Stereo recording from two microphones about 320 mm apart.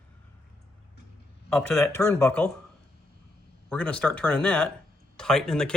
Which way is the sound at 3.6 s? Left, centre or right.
Centre.